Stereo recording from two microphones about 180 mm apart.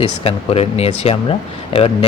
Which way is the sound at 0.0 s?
35° left (ahead or behind).